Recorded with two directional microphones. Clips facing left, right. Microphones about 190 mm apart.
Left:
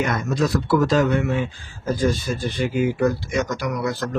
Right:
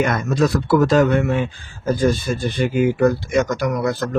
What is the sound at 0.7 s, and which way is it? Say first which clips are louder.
Speech: right 3 dB; 55° right (ahead or behind).